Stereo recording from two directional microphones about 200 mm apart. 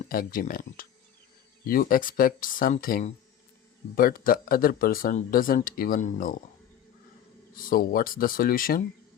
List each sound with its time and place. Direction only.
0.1 s speech: 45° left (ahead or behind)
7.5 s speech: 45° left (ahead or behind)